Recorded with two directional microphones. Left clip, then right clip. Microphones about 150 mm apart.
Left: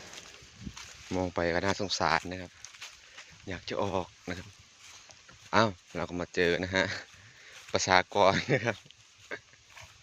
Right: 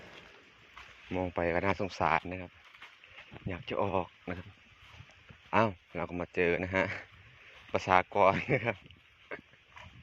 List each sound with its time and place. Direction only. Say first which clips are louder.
1.1 s speech: left 2 dB; 30° left (ahead or behind)
3.5 s speech: even; 15° left (ahead or behind)
5.5 s speech: left 2 dB; 25° left (ahead or behind)
9.3 s pig: left 3 dB; 25° left (ahead or behind)